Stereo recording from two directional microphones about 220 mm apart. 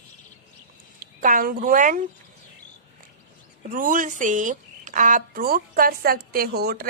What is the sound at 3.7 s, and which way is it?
A woman's voice, 35° right (ahead or behind).